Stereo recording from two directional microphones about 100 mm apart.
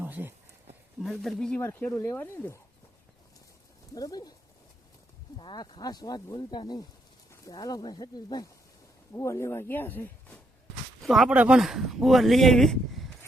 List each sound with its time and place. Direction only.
0.0 s a sound: 20° right (ahead or behind)
1.0 s speech: centre (ahead or behind)
1.6 s speech: 25° left (ahead or behind)
3.9 s speech: 40° left (ahead or behind)
5.4 s speech: 50° left (ahead or behind)
9.1 s speech: 30° left (ahead or behind)
11.0 s speech: centre (ahead or behind)
11.3 s speech: 10° right (ahead or behind)